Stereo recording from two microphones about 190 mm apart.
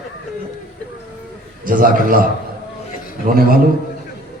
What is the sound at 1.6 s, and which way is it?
A man's voice, 45° right (ahead or behind).